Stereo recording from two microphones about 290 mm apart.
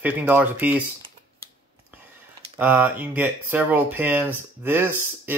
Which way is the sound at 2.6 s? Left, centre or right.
Centre.